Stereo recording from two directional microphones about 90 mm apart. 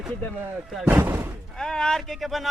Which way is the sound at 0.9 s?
20° right (ahead or behind).